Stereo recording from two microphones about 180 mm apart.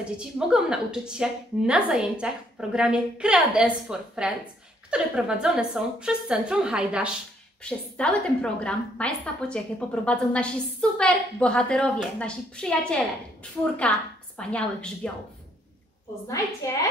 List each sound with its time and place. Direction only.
0.2 s a woman's voice: 5° right (ahead or behind)
7.6 s a woman's voice: 5° left (ahead or behind)
16.6 s a woman's voice: 20° left (ahead or behind)